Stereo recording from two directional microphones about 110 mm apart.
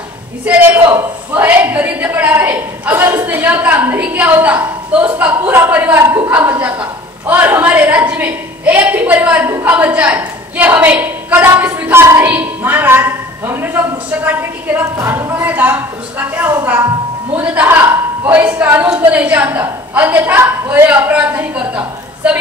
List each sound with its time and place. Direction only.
0.5 s a man's voice: 15° right (ahead or behind)